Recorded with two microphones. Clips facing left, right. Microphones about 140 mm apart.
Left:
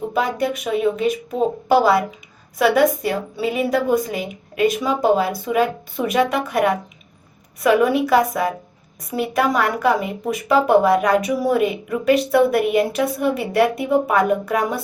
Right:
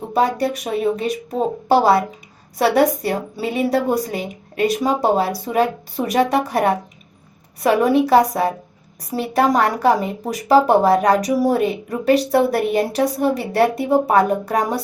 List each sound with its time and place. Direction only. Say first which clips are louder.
0.1 s speech: right 5 dB; 35° right (ahead or behind)